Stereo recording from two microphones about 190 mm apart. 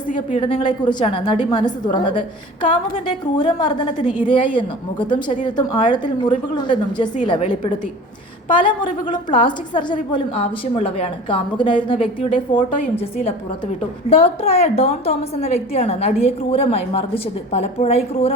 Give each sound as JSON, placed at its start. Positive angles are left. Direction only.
{"t": 0.1, "sound": "a woman's voice", "side_deg": 40}
{"t": 0.4, "sound": "a woman's voice", "side_deg": 25}
{"t": 14.1, "sound": "a woman's voice", "side_deg": 30}